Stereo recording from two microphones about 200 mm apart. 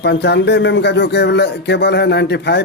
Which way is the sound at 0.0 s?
55° left (ahead or behind).